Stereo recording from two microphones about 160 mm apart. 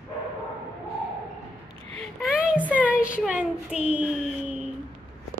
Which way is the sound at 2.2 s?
5° right (ahead or behind).